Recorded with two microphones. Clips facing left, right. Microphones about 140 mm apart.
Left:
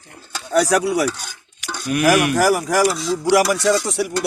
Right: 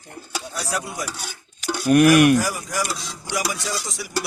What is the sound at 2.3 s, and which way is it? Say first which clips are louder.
A man's voice: left 8 dB; 75° left (ahead or behind).